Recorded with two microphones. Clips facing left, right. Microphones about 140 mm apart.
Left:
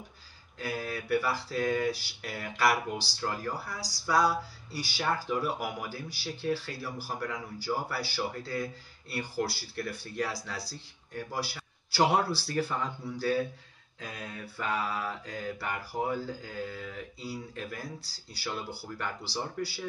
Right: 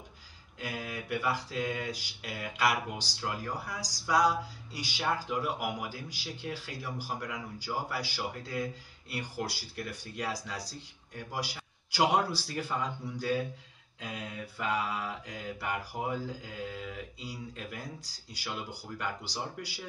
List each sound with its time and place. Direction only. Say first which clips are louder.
0.6 s a man's voice: left 3 dB; 15° right (ahead or behind)